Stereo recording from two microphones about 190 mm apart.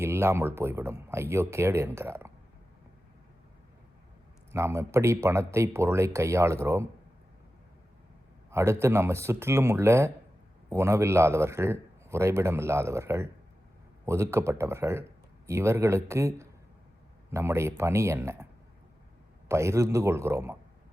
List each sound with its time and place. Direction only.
0.0 s a man's voice: 10° right (ahead or behind)
4.5 s a man's voice: 15° right (ahead or behind)
8.4 s a man's voice: 15° right (ahead or behind)
19.5 s a man's voice: 15° right (ahead or behind)